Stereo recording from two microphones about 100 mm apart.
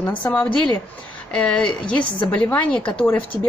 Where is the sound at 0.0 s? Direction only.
15° left (ahead or behind).